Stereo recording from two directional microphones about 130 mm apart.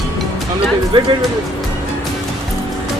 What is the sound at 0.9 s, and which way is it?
Speech, 40° right (ahead or behind).